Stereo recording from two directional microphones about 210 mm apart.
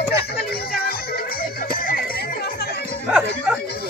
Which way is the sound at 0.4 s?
45° left (ahead or behind).